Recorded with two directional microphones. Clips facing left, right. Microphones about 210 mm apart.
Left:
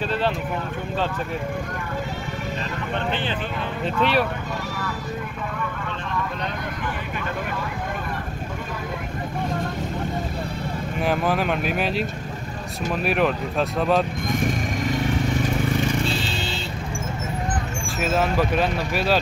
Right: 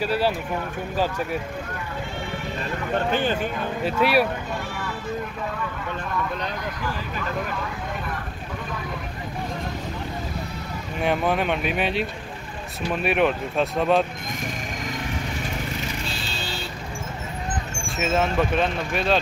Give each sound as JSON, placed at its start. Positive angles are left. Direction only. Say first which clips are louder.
{"t": 0.0, "sound": "speech", "louder": "right 1 dB", "side_deg": -10}
{"t": 2.9, "sound": "speech", "louder": "right 4 dB", "side_deg": -45}
{"t": 3.8, "sound": "speech", "louder": "right 1 dB", "side_deg": -10}
{"t": 11.0, "sound": "speech", "louder": "even", "side_deg": 0}
{"t": 17.8, "sound": "speech", "louder": "even", "side_deg": 0}